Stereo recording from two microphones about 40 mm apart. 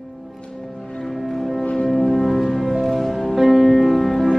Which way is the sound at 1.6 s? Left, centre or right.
Left.